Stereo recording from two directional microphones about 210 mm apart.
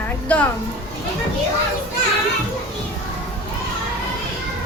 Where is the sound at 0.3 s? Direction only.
5° left (ahead or behind).